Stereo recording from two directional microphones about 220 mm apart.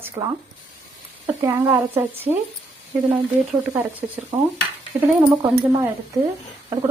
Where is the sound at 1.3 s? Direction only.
10° right (ahead or behind).